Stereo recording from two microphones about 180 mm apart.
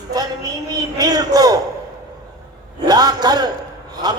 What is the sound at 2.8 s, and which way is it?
Speech, 20° right (ahead or behind).